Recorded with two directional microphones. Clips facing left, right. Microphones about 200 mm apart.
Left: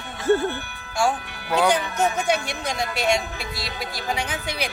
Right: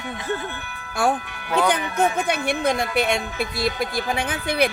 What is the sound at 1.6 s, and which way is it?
Speech, 55° right (ahead or behind).